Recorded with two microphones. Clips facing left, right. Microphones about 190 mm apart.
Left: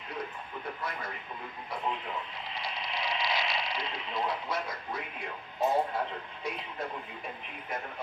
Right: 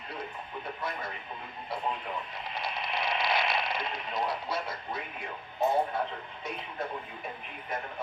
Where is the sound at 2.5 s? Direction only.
55° right (ahead or behind).